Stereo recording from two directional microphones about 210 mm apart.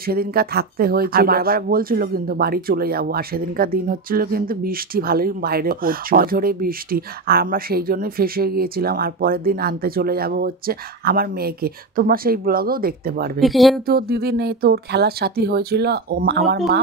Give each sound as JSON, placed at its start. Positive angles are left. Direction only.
{"t": 0.0, "sound": "speech", "side_deg": -45}
{"t": 13.4, "sound": "speech", "side_deg": 0}
{"t": 13.8, "sound": "speech", "side_deg": -45}